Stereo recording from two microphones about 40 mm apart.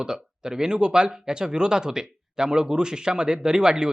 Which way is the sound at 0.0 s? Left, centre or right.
Centre.